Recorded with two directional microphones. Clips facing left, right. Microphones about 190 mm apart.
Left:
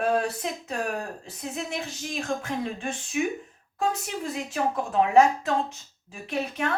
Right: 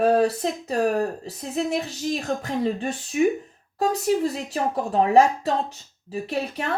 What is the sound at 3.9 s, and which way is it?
Speech, 35° right (ahead or behind).